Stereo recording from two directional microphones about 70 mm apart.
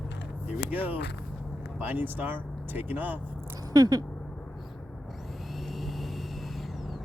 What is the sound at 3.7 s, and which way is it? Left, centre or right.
Speech, right.